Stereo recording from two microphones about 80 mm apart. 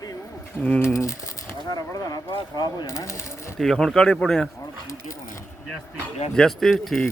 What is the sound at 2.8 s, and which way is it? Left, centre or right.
Speech, left.